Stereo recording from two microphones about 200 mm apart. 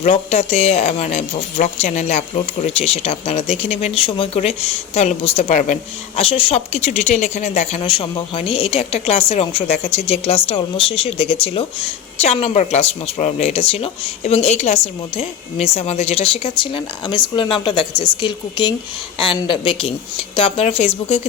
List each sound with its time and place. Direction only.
0.0 s a woman's voice: 35° left (ahead or behind)